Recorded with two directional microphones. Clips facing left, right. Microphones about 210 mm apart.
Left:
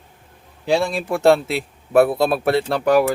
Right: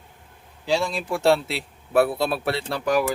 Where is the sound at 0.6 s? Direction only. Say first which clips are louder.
Left 4 dB; 55° left (ahead or behind).